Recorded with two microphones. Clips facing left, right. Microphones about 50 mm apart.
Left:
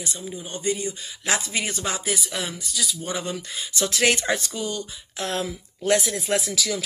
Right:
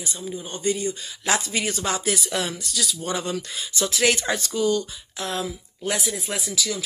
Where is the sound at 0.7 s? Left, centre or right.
Left.